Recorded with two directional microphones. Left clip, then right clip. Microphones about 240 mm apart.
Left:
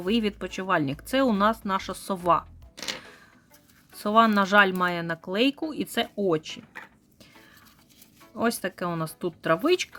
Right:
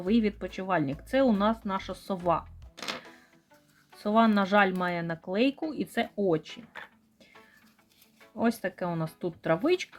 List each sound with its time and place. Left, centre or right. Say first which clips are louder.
0.0 s speech: left 1 dB; centre
3.9 s speech: left 4 dB; centre
8.4 s speech: left 2 dB; centre